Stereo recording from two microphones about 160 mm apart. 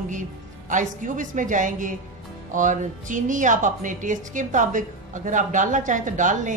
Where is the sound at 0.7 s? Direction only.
55° right (ahead or behind).